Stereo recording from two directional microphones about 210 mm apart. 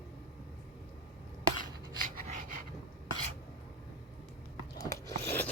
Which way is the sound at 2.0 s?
40° right (ahead or behind).